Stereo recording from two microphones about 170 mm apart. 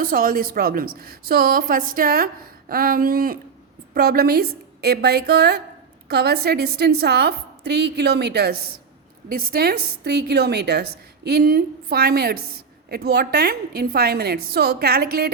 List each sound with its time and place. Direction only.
0.0 s a woman's voice: 55° right (ahead or behind); by 8.5 s 75° right (ahead or behind)
9.3 s a woman's voice: 60° right (ahead or behind)